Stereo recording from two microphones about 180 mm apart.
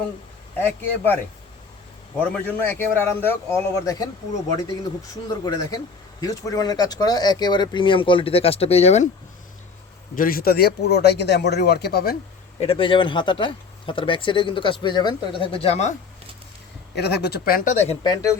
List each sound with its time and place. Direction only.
0.6 s a man's voice: 10° left (ahead or behind)
2.5 s a man's voice: 10° left (ahead or behind)
5.3 s speech: 20° left (ahead or behind)
10.2 s speech: 55° left (ahead or behind)
12.5 s speech: 30° left (ahead or behind)
16.9 s speech: 65° left (ahead or behind)
18.0 s speech: 20° left (ahead or behind)